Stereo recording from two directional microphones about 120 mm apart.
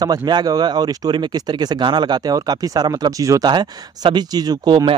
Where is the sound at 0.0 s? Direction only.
35° right (ahead or behind).